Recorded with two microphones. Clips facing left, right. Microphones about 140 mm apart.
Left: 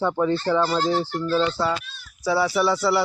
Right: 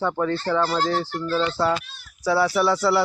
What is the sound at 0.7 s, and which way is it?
Speech, 20° left (ahead or behind).